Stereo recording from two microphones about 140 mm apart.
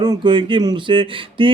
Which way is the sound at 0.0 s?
30° right (ahead or behind).